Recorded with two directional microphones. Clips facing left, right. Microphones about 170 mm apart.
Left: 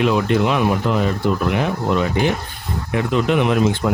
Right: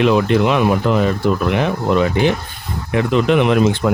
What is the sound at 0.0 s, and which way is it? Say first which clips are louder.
Speech: right 3 dB; 80° right.